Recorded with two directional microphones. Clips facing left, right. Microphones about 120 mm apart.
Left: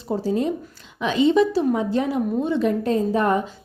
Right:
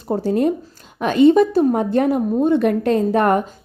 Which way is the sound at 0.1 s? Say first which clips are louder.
Right 4 dB; 60° right (ahead or behind).